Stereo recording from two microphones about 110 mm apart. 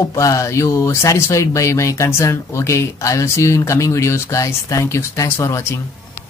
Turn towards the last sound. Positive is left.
turn(degrees=25)  # may be behind; listen again after turning